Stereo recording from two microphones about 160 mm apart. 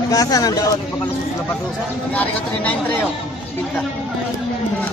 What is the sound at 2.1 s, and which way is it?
Speech, 10° left (ahead or behind).